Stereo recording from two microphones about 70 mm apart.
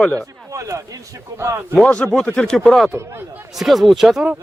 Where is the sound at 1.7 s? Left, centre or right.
Centre.